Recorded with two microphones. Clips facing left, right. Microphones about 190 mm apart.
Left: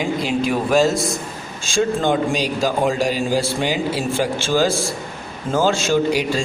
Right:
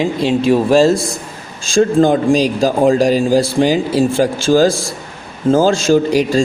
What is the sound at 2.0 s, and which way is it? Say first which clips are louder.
A man's voice: right 8 dB; 40° right (ahead or behind).